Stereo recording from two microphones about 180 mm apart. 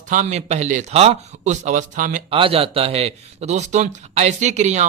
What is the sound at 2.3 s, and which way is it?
A man's voice, 30° right (ahead or behind).